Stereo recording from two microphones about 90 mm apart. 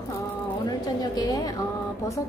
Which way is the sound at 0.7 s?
45° left (ahead or behind).